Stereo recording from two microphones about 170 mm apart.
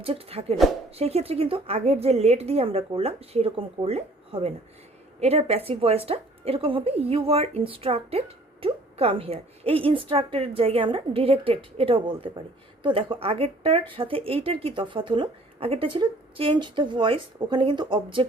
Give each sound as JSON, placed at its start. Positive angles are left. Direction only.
{"t": 0.0, "sound": "speech", "side_deg": -35}